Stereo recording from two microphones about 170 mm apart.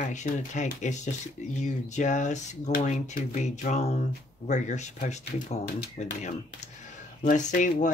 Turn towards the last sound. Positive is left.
turn(degrees=50)  # may be behind; listen again after turning